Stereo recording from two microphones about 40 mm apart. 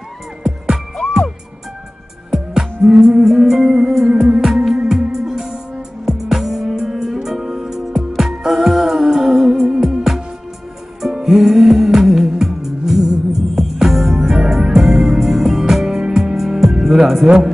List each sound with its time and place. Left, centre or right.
2.3 s music: centre